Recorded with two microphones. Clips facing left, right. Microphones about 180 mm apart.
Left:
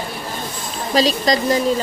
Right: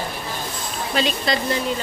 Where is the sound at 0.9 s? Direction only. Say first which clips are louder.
Left 6 dB; 35° left (ahead or behind).